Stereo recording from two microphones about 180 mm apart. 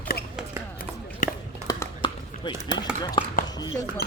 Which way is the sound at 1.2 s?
45° left (ahead or behind).